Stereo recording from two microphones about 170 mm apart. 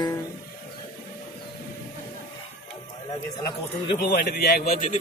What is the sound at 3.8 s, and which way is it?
Speech, 70° left (ahead or behind).